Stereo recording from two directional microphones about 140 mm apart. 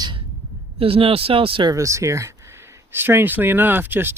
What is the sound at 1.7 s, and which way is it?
Speech, 20° right (ahead or behind).